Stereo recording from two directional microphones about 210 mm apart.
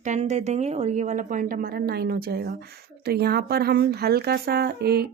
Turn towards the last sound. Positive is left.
turn(degrees=-50)  # may be behind; listen again after turning